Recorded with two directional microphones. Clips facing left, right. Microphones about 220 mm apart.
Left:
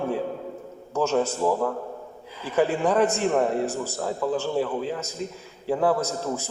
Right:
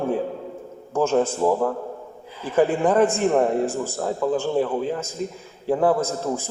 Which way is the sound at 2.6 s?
50° right (ahead or behind).